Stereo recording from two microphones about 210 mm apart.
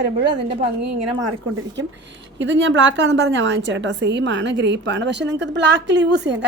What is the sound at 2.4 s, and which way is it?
A woman's voice, 60° right (ahead or behind).